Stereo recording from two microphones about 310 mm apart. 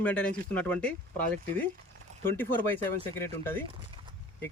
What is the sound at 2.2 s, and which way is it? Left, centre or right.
Speech, centre.